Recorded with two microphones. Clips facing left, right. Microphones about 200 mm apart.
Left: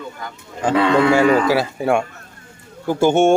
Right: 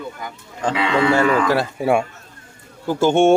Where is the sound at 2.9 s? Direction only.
10° left (ahead or behind).